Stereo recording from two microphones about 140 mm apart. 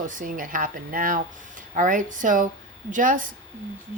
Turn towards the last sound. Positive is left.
turn(degrees=-70)  # may be behind; listen again after turning